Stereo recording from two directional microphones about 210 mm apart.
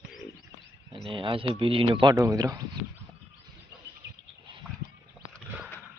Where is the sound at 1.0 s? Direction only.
25° right (ahead or behind).